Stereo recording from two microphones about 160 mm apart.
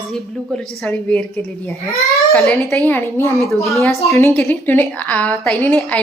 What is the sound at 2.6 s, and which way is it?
A woman's voice, 15° left (ahead or behind).